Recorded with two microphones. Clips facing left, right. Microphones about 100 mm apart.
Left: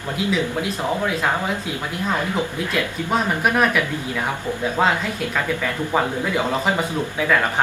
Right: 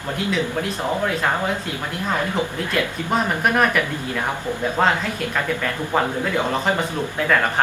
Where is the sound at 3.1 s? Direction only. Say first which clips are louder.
Even; centre (ahead or behind).